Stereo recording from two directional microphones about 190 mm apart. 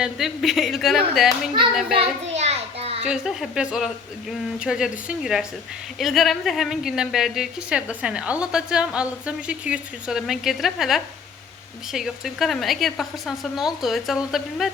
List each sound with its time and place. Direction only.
0.0 s a woman's voice: centre (ahead or behind)
2.3 s children playing: 35° right (ahead or behind)
3.1 s a woman's voice: 5° right (ahead or behind)